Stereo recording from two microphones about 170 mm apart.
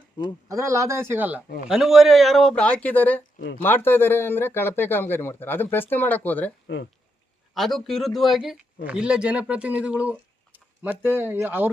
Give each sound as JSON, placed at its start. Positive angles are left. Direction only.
{"t": 0.4, "sound": "speech", "side_deg": -20}
{"t": 3.3, "sound": "speech", "side_deg": 65}
{"t": 3.6, "sound": "speech", "side_deg": 10}
{"t": 7.5, "sound": "speech", "side_deg": 0}